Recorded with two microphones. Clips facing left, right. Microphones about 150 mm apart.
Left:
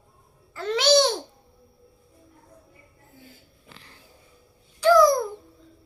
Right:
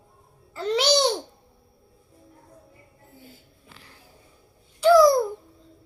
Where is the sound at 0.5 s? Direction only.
30° right (ahead or behind).